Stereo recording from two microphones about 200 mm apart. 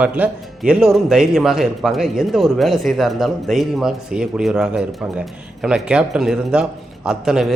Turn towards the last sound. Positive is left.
turn(degrees=0)  # may be behind; listen again after turning